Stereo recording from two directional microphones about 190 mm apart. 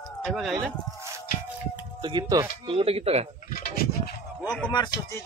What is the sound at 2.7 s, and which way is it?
Speech, 30° right (ahead or behind).